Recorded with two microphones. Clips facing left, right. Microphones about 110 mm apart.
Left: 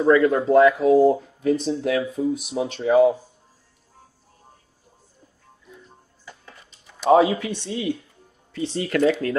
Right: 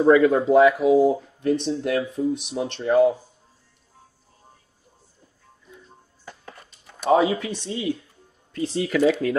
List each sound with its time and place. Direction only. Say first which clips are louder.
0.3 s speech: even; centre (ahead or behind)
6.2 s a sound: right 3 dB; 50° right (ahead or behind)
7.1 s speech: left 3 dB; centre (ahead or behind)